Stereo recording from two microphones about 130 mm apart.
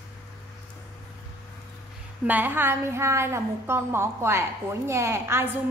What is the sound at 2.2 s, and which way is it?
A woman's voice, 15° right (ahead or behind).